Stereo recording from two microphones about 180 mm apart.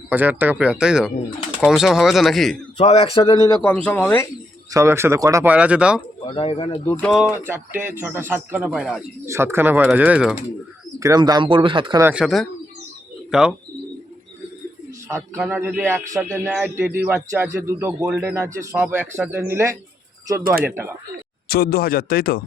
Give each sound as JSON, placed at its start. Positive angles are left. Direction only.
{"t": 0.1, "sound": "a man's voice", "side_deg": -10}
{"t": 2.7, "sound": "a man's voice", "side_deg": 30}
{"t": 3.6, "sound": "a man's voice", "side_deg": 10}
{"t": 4.7, "sound": "a man's voice", "side_deg": -15}
{"t": 6.2, "sound": "speech", "side_deg": 30}
{"t": 7.0, "sound": "speech", "side_deg": 0}
{"t": 7.4, "sound": "a man's voice", "side_deg": -10}
{"t": 9.2, "sound": "a man's voice", "side_deg": -15}
{"t": 11.0, "sound": "speech", "side_deg": -20}
{"t": 12.0, "sound": "speech", "side_deg": -5}
{"t": 15.1, "sound": "a man's voice", "side_deg": -15}
{"t": 21.4, "sound": "speech", "side_deg": 60}